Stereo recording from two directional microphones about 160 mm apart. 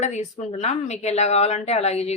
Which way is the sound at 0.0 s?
45° left (ahead or behind).